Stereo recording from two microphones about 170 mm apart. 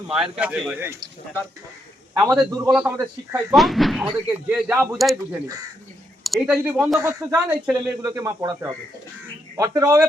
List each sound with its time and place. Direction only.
0.1 s speech: 5° right (ahead or behind)
2.3 s speech: 5° right (ahead or behind)
7.0 s speech: 20° right (ahead or behind)
7.3 s speech: 5° right (ahead or behind)
8.0 s speech: 20° right (ahead or behind)